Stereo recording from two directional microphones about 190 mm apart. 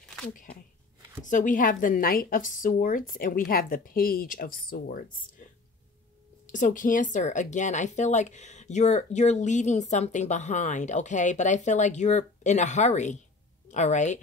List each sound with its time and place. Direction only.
0.3 s a woman's voice: 45° left (ahead or behind)
6.5 s speech: 45° left (ahead or behind)